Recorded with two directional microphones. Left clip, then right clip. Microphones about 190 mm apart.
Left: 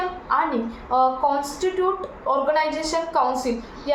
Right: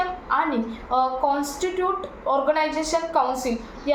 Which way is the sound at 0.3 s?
5° left (ahead or behind).